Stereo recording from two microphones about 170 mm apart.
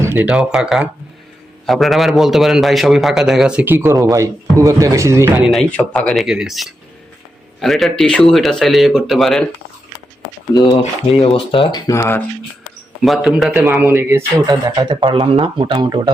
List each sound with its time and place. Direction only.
0.0 s a man's voice: 10° right (ahead or behind)
5.5 s a man's voice: 5° left (ahead or behind)
10.5 s speech: 25° left (ahead or behind)
11.9 s speech: 15° left (ahead or behind)
13.0 s speech: centre (ahead or behind); by 16.1 s 25° right (ahead or behind)